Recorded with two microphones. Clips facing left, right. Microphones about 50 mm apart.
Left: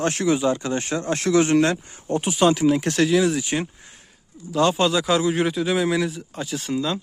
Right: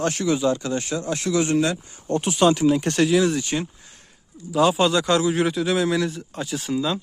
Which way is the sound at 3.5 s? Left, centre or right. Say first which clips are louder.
Left 1 dB; left.